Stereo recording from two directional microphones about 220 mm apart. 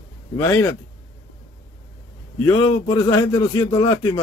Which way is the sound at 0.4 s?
10° left (ahead or behind).